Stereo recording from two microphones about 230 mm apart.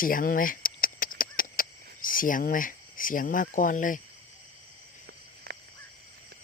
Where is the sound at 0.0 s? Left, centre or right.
Left.